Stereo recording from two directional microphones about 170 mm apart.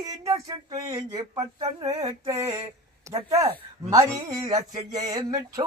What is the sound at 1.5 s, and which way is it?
Speech, 40° right (ahead or behind).